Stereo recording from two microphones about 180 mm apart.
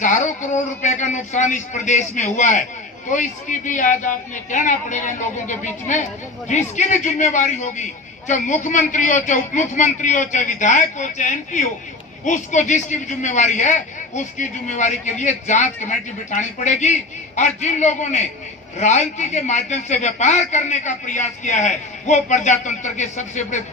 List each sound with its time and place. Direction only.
0.0 s a man's voice: 45° left (ahead or behind)